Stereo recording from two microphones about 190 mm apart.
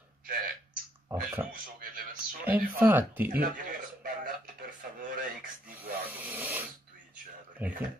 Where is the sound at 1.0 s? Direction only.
10° right (ahead or behind).